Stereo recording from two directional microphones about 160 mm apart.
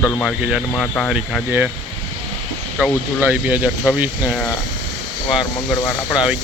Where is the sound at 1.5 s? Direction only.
10° right (ahead or behind).